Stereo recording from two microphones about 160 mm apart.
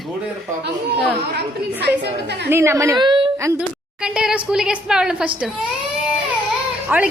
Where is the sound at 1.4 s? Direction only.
90° right.